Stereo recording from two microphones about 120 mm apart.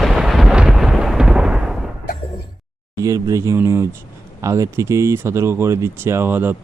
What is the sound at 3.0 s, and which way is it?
Speech, 25° right (ahead or behind).